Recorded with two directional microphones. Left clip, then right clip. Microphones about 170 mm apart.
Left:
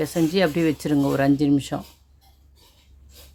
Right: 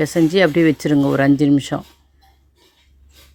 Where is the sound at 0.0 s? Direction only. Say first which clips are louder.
Right 6 dB; 25° right (ahead or behind).